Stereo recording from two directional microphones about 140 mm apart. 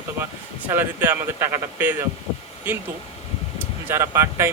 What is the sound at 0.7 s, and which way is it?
Speech, 15° right (ahead or behind).